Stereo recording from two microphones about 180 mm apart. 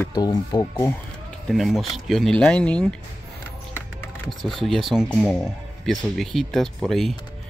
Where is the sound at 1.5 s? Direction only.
Centre (ahead or behind).